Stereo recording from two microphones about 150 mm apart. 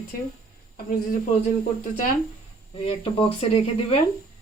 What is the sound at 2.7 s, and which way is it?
Speech, 40° left (ahead or behind).